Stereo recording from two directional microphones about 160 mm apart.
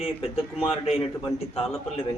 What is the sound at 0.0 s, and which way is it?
A man's voice, 40° left (ahead or behind).